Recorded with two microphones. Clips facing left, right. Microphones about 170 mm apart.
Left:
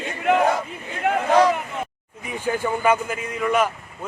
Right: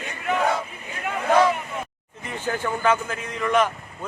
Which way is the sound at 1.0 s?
75° left (ahead or behind).